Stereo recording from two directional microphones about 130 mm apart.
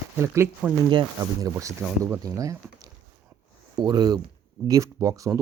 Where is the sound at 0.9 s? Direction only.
30° right (ahead or behind).